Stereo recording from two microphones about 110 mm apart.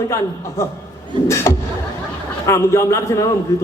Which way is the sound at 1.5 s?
25° left (ahead or behind).